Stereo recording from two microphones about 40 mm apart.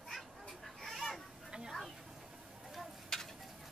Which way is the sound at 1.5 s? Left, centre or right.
Centre.